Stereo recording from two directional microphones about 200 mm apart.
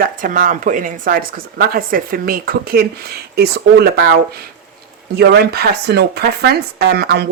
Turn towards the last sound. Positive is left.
turn(degrees=-55)  # may be behind; listen again after turning